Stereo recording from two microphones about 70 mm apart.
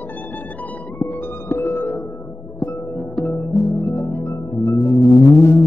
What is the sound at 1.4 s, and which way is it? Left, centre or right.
Music, left.